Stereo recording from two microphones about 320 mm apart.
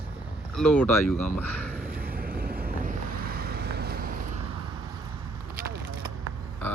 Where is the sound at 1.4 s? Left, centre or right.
Centre.